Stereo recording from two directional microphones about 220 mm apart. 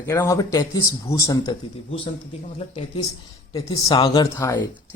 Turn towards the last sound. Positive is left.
turn(degrees=15)  # may be behind; listen again after turning